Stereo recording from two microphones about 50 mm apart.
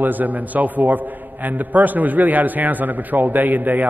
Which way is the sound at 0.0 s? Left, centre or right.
Right.